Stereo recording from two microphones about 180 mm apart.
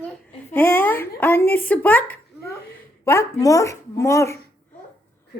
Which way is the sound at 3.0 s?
15° left (ahead or behind).